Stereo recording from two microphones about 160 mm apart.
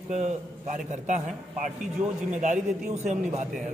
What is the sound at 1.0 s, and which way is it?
A man's voice, 50° right (ahead or behind).